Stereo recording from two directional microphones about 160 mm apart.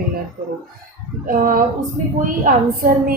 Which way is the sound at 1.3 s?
60° right (ahead or behind).